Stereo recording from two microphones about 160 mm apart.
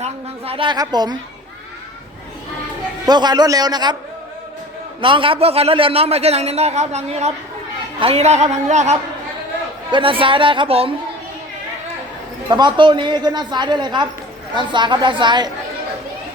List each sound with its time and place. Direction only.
0.0 s a woman's voice: 35° right (ahead or behind)
3.1 s a woman's voice: 25° right (ahead or behind)
4.9 s a man's voice: 30° right (ahead or behind)
9.9 s a man's voice: 35° right (ahead or behind)
12.5 s a woman's voice: 25° right (ahead or behind)